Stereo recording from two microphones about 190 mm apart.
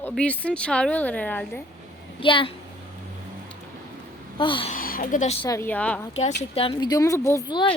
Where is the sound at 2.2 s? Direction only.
25° left (ahead or behind).